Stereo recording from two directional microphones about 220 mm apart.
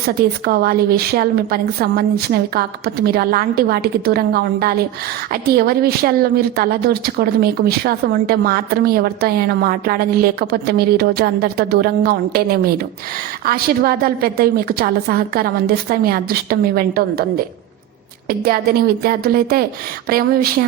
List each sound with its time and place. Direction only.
0.2 s a woman's voice: 45° right (ahead or behind)